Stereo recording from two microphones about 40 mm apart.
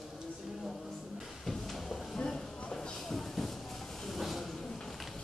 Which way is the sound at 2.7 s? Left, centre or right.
Left.